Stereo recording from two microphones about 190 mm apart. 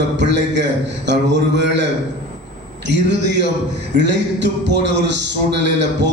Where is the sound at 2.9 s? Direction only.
65° right (ahead or behind).